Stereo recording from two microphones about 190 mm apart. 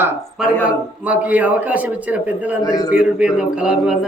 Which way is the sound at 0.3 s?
5° right (ahead or behind).